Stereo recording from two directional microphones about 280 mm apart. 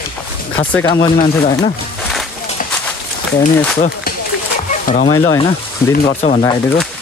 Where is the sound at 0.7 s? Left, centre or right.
Centre.